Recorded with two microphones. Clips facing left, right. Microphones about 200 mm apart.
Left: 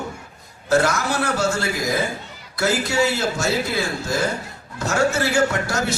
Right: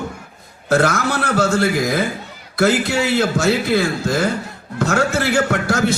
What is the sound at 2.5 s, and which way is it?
Speech, 55° right (ahead or behind).